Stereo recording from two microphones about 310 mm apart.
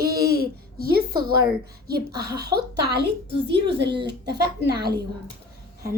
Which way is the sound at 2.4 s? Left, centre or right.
Right.